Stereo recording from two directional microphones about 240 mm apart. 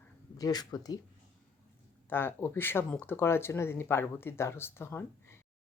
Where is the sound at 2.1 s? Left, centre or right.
Centre.